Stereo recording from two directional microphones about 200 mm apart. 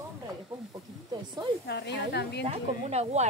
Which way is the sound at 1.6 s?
55° left (ahead or behind).